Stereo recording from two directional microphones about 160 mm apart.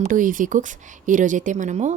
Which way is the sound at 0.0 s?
55° right (ahead or behind).